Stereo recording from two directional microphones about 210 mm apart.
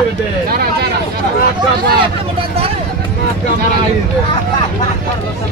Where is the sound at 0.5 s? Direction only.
45° right (ahead or behind).